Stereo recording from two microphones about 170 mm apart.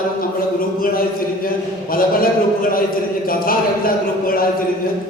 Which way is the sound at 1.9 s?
55° left (ahead or behind).